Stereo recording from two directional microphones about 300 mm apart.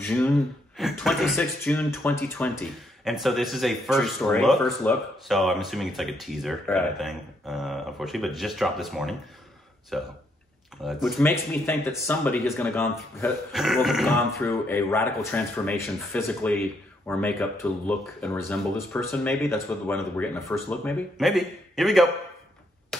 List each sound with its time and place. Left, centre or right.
0.0 s speech: centre